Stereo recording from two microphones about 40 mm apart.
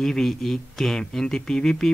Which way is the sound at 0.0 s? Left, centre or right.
Centre.